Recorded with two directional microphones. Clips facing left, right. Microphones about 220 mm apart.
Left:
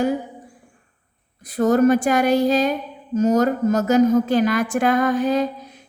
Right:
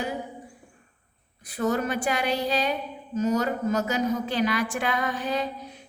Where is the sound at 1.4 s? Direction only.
40° left (ahead or behind).